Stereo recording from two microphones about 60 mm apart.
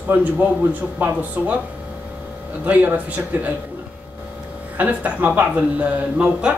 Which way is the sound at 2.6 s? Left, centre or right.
Right.